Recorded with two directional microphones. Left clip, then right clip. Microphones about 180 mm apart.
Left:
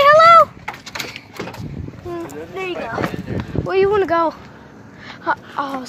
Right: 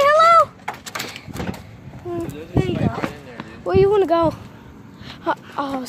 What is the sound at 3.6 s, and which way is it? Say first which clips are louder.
Speech: right 1 dB; 15° right (ahead or behind).